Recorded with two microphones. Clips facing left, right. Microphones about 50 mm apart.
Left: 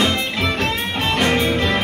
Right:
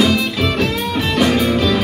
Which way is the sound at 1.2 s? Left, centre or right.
Left.